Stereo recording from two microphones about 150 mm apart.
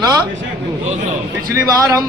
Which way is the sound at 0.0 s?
25° right (ahead or behind).